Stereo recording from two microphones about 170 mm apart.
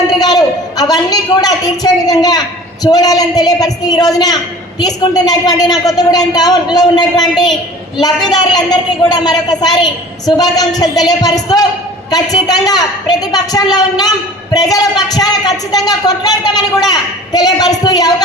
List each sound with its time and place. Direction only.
0.1 s a woman's voice: 25° left (ahead or behind)